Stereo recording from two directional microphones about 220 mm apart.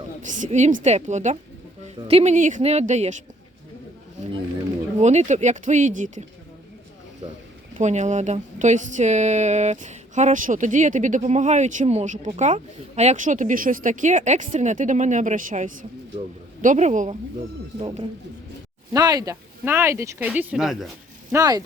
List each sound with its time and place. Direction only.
0.4 s speech: 35° right (ahead or behind)
4.9 s speech: 30° right (ahead or behind)
7.8 s speech: 35° right (ahead or behind); by 20.9 s centre (ahead or behind)
21.3 s speech: 15° right (ahead or behind)